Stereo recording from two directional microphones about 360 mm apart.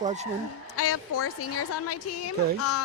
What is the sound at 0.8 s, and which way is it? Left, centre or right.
A woman's voice, left.